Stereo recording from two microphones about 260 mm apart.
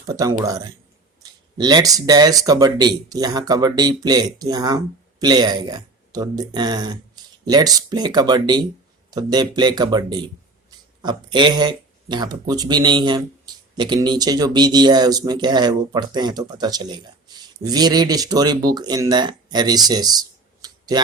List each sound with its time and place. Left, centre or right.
0.1 s speech: centre